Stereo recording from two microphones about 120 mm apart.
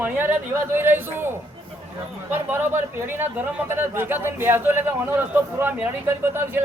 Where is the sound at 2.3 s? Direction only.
20° right (ahead or behind).